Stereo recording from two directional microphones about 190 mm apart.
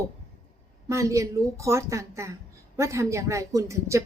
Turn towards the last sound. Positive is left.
turn(degrees=-15)  # may be behind; listen again after turning